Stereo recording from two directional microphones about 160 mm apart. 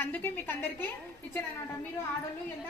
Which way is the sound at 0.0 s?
10° left (ahead or behind).